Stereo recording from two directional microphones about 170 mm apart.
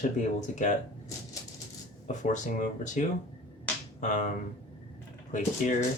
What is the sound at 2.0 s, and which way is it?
Speech, 45° left (ahead or behind).